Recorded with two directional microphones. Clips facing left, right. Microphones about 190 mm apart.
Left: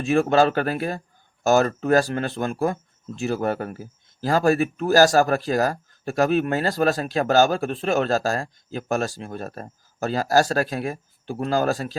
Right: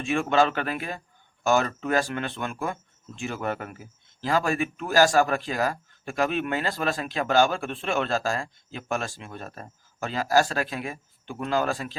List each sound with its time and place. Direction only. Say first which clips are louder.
0.0 s a man's voice: left 5 dB; 40° left (ahead or behind)